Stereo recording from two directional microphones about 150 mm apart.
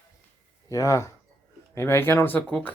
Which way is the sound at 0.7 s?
20° left (ahead or behind).